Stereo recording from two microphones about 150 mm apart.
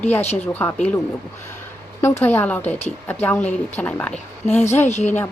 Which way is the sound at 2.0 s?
15° left (ahead or behind).